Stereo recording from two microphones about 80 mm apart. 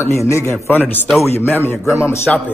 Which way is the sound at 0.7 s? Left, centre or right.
Left.